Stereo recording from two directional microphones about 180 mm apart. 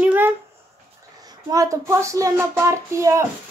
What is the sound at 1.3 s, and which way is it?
Speech, 20° right (ahead or behind).